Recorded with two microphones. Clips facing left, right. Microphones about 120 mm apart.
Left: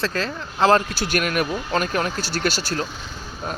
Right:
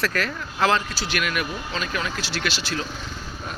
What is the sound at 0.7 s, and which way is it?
Speech, 45° left (ahead or behind).